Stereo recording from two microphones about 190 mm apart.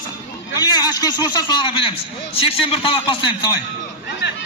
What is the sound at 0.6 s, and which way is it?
A man's voice, 20° left (ahead or behind).